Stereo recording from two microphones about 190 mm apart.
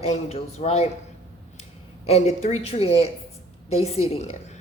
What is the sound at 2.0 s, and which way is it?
A woman's voice, 35° left (ahead or behind).